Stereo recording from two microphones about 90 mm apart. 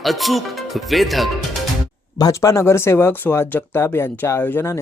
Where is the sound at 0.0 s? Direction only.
Centre (ahead or behind).